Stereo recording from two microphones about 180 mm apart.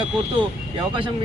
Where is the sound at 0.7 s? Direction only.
25° right (ahead or behind).